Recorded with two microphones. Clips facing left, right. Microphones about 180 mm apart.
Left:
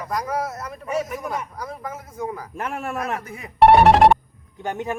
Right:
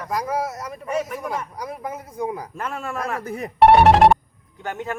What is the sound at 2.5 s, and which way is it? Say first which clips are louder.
Speech: left 1 dB; 15° left (ahead or behind).